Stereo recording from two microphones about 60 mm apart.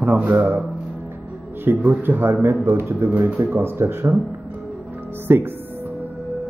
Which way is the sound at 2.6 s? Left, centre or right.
Right.